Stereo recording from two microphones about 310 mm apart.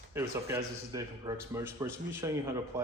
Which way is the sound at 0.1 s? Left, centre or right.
Centre.